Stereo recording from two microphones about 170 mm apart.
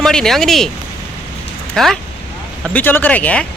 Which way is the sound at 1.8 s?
5° left (ahead or behind).